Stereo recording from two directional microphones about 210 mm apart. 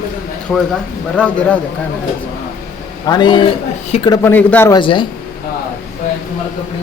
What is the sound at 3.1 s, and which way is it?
A man's voice, 20° left (ahead or behind).